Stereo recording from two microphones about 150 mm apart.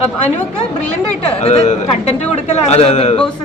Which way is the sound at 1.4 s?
45° left (ahead or behind).